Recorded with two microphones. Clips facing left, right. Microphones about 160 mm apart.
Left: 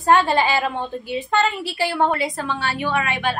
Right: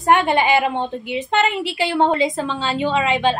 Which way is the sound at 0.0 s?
20° right (ahead or behind).